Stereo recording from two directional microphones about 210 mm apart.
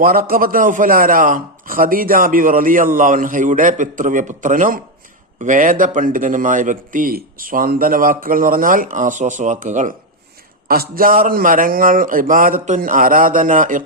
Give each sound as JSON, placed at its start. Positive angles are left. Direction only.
{"t": 0.0, "sound": "a man's voice", "side_deg": -45}